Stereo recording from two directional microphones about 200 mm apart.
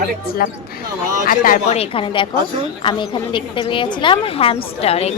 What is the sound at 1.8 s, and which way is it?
A woman's voice, 25° left (ahead or behind).